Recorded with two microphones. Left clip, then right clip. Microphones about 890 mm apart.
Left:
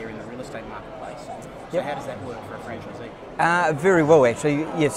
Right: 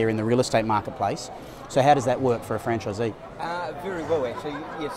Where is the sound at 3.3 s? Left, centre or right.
Left.